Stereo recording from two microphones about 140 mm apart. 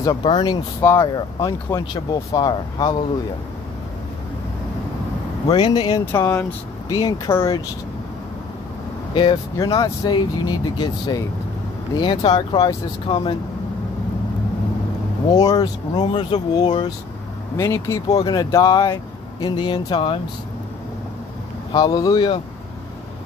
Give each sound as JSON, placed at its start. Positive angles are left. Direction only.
{"t": 0.0, "sound": "speech", "side_deg": 30}
{"t": 0.7, "sound": "speech", "side_deg": 20}
{"t": 5.5, "sound": "speech", "side_deg": 35}
{"t": 6.1, "sound": "speech", "side_deg": 20}
{"t": 9.1, "sound": "speech", "side_deg": 35}
{"t": 15.3, "sound": "speech", "side_deg": 25}
{"t": 17.6, "sound": "speech", "side_deg": 20}
{"t": 21.7, "sound": "speech", "side_deg": 30}